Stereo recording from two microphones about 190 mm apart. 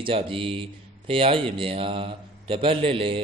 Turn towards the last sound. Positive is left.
turn(degrees=-30)  # may be behind; listen again after turning